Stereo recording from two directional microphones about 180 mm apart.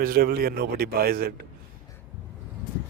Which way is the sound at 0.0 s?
55° right (ahead or behind).